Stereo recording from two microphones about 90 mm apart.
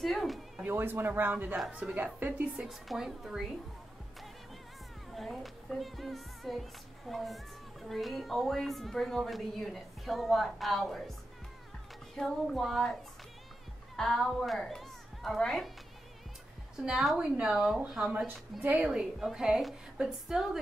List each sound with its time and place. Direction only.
0.0 s speech: centre (ahead or behind)
0.7 s a man's voice: 25° right (ahead or behind)
2.7 s speech: 5° right (ahead or behind)
5.1 s speech: centre (ahead or behind)
12.2 s speech: 5° left (ahead or behind)
13.9 s a woman's voice: 5° left (ahead or behind)
16.8 s a woman's voice: 5° right (ahead or behind)
18.6 s a woman's voice: 20° right (ahead or behind)